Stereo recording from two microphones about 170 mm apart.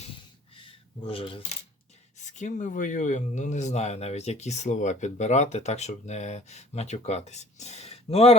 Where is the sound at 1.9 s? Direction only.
45° left (ahead or behind).